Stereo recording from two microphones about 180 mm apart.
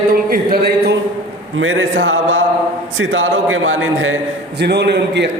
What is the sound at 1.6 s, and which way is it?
A man's voice, 90° right.